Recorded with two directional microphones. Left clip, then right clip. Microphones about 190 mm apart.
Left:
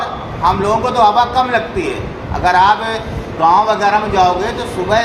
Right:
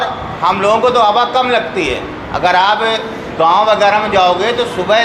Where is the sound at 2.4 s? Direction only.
10° right (ahead or behind).